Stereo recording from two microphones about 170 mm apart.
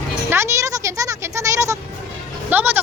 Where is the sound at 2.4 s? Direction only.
10° right (ahead or behind).